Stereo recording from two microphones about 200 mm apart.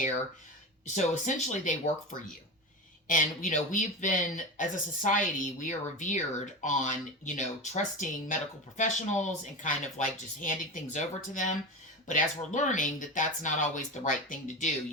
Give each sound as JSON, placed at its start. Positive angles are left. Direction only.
{"t": 0.9, "sound": "speech", "side_deg": 35}